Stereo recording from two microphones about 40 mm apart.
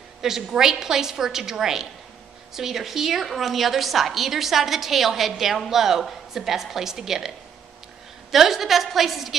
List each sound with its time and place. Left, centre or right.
0.2 s a woman's voice: centre